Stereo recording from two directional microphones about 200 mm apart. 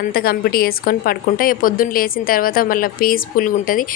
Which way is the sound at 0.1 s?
50° left (ahead or behind).